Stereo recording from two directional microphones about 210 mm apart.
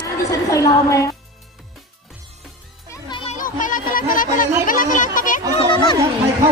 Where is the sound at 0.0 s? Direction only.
15° left (ahead or behind).